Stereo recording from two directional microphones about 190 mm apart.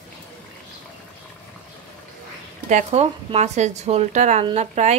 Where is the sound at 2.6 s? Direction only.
35° right (ahead or behind).